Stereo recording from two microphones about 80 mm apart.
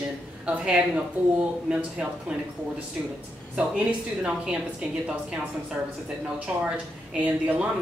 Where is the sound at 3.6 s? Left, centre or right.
Centre.